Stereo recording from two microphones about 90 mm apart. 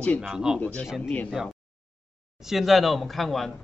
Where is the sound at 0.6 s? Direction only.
15° left (ahead or behind).